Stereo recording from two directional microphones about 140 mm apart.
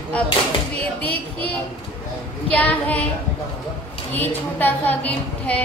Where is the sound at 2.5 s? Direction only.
10° left (ahead or behind).